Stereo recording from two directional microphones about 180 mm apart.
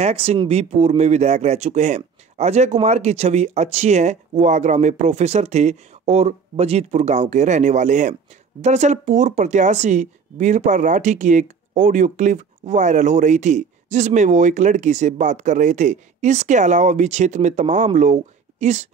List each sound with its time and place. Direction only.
0.0 s speech: 35° right (ahead or behind)